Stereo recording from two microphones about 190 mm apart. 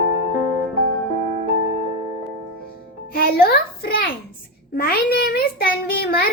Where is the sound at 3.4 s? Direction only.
55° left (ahead or behind).